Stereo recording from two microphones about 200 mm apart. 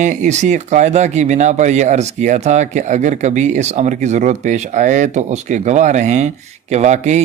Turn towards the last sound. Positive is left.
turn(degrees=-35)  # may be behind; listen again after turning